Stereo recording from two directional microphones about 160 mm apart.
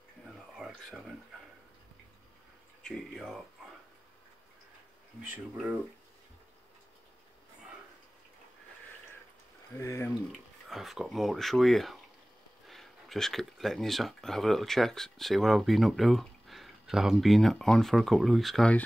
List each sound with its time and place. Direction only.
0.6 s a sound: centre (ahead or behind)
2.8 s speech: 5° left (ahead or behind)
9.8 s speech: 15° left (ahead or behind)
10.3 s speech: centre (ahead or behind)